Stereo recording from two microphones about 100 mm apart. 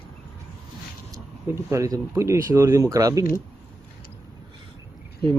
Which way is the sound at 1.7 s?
30° right (ahead or behind).